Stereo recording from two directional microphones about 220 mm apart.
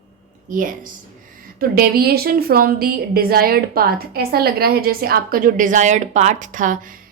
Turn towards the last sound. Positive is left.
turn(degrees=-35)  # may be behind; listen again after turning